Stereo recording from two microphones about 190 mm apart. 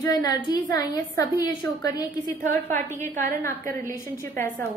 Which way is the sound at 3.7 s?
10° left (ahead or behind).